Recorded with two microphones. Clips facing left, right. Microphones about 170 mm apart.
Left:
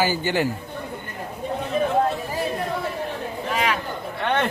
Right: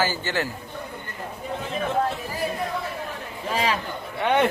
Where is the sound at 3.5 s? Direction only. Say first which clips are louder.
Even; 30° right (ahead or behind).